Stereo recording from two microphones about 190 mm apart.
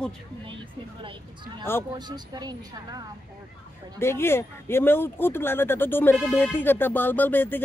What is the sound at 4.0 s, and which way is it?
Speech, 15° left (ahead or behind).